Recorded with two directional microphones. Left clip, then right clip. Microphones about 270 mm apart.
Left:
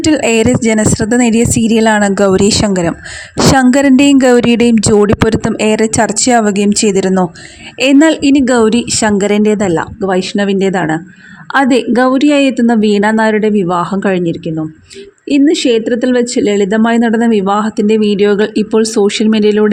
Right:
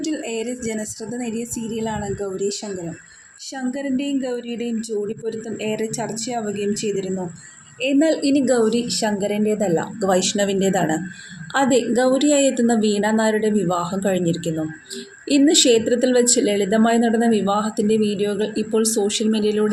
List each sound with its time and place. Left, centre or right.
0.0 s speech: left